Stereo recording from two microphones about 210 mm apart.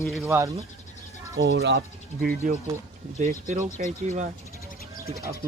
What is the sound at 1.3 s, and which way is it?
Speech, 60° right (ahead or behind).